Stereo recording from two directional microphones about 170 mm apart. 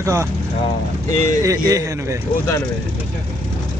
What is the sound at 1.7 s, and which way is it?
Speech, 20° right (ahead or behind).